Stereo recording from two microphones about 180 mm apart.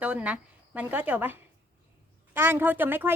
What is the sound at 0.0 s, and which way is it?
A woman's voice, 5° right (ahead or behind).